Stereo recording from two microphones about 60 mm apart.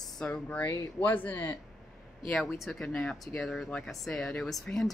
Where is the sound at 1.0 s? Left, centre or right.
Left.